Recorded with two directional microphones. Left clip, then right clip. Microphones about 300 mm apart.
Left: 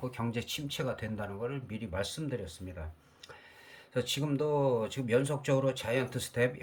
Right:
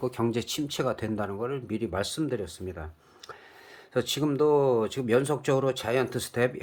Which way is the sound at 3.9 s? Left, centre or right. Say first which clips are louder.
Right 6 dB; centre.